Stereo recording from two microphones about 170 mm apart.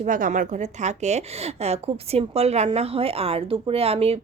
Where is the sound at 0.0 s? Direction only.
50° right (ahead or behind).